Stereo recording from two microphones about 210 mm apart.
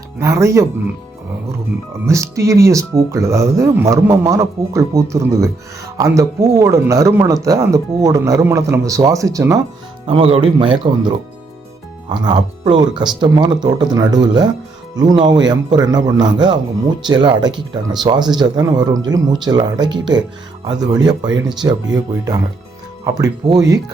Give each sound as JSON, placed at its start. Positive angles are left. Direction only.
{"t": 0.2, "sound": "speech", "side_deg": -15}
{"t": 2.0, "sound": "speech", "side_deg": -15}
{"t": 10.1, "sound": "speech", "side_deg": -25}